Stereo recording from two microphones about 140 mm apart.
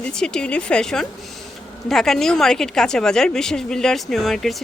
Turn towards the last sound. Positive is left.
turn(degrees=0)  # may be behind; listen again after turning